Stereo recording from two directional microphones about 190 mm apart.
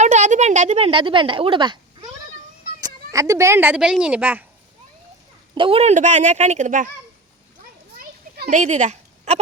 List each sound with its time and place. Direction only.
0.0 s speech: 40° right (ahead or behind); by 4.4 s 10° right (ahead or behind)
5.5 s a child's voice: 30° right (ahead or behind)
7.9 s children playing: 45° right (ahead or behind)